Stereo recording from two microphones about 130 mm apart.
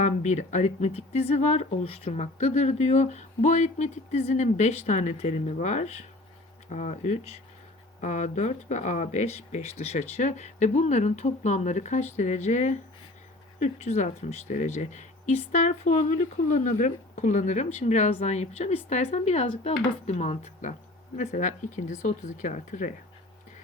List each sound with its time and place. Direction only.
0.0 s speech: 65° left (ahead or behind)
13.6 s speech: 60° left (ahead or behind)
21.2 s speech: 75° left (ahead or behind)